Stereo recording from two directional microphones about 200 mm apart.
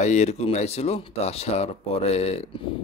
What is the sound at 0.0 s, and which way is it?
Speech, 35° left (ahead or behind).